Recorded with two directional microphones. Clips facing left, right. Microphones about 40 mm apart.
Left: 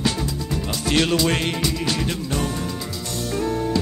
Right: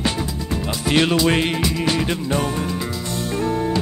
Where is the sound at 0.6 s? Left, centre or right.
Centre.